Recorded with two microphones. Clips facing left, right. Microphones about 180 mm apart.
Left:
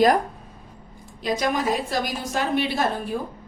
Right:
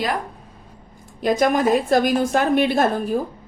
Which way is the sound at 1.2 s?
50° right (ahead or behind).